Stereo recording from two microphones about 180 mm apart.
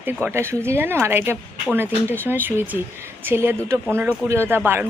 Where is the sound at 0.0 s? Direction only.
10° right (ahead or behind).